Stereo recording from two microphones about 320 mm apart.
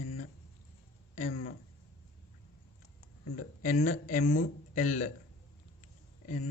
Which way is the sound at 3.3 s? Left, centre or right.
Left.